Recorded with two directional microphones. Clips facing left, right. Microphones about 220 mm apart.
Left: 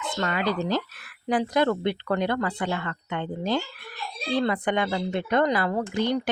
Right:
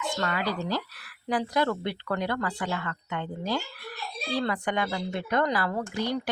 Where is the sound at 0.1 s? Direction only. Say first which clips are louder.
Left 5 dB; 20° left (ahead or behind).